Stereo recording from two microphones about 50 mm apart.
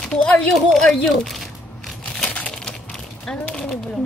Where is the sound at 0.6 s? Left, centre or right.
Centre.